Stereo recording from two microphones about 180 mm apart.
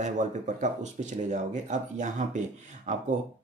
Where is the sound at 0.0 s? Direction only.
40° right (ahead or behind).